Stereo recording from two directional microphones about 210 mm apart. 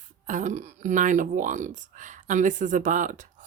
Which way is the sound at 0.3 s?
35° right (ahead or behind).